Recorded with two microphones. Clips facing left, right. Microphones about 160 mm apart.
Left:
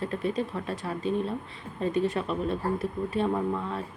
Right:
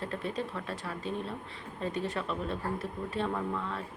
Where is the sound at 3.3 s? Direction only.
25° left (ahead or behind).